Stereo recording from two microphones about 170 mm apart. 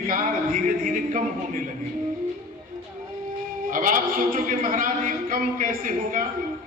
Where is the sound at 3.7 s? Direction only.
50° right (ahead or behind).